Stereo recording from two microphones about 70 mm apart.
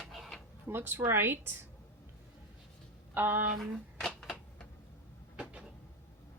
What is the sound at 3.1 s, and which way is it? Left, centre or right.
Speech, right.